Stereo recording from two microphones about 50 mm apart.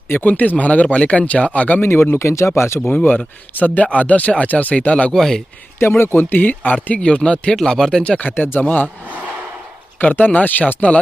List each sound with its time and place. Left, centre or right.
0.1 s a man's voice: left
1.8 s speech: left
2.2 s speech: left
2.9 s a man's voice: left
5.1 s speech: centre
6.0 s a man's voice: left
7.5 s speech: centre
8.2 s speech: left
10.0 s speech: left